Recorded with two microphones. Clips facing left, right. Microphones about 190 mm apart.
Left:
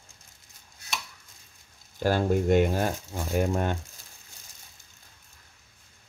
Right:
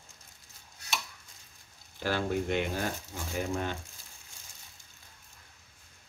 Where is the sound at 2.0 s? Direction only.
45° left (ahead or behind).